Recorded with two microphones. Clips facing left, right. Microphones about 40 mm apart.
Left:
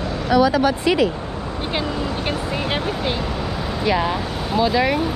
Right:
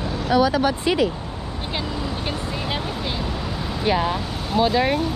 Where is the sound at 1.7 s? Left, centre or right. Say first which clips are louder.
Left 3 dB; centre.